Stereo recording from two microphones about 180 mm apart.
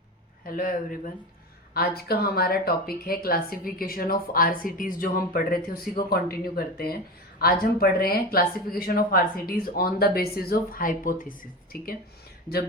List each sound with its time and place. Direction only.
0.4 s a man's voice: 55° left (ahead or behind)